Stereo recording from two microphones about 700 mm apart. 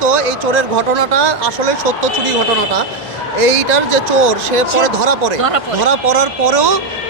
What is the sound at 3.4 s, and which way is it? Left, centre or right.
Speech, right.